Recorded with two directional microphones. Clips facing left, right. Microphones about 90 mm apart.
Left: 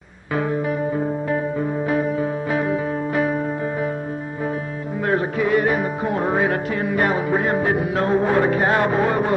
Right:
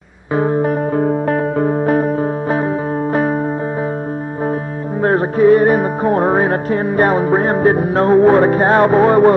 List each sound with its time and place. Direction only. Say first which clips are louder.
0.3 s music: right 6 dB; 30° right (ahead or behind)
0.6 s music: right 6 dB; 45° right (ahead or behind)
1.0 s music: right 7 dB; 65° right (ahead or behind); by 3.3 s 40° right (ahead or behind)
5.0 s music: right 9 dB; 40° right (ahead or behind)